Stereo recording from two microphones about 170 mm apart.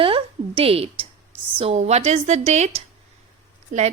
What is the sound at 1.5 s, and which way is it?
A woman's voice, 40° right (ahead or behind).